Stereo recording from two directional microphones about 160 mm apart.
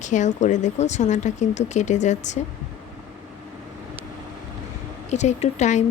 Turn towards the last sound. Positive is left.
turn(degrees=45)  # may be behind; listen again after turning